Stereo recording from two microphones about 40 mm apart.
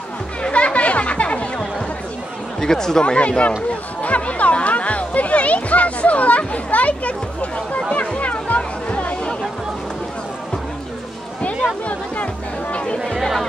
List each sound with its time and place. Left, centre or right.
0.4 s music: left
2.6 s speech: centre; by 3.5 s left
4.0 s music: left
8.2 s music: left
13.0 s chatter: centre